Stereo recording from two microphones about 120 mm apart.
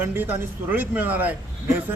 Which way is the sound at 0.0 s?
15° right (ahead or behind).